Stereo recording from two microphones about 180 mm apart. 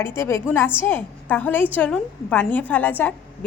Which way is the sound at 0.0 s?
15° left (ahead or behind).